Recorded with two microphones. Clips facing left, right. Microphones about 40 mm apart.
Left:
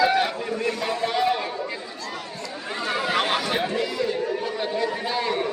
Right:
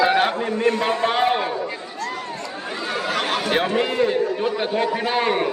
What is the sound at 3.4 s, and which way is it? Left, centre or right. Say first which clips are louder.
Chatter: right 4 dB; right.